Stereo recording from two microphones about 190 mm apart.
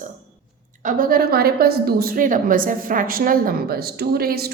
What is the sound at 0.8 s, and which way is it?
A woman's voice, 45° right (ahead or behind).